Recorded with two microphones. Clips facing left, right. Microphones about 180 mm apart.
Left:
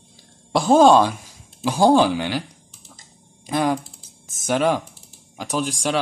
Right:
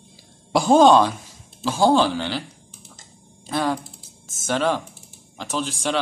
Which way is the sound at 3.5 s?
15° left (ahead or behind).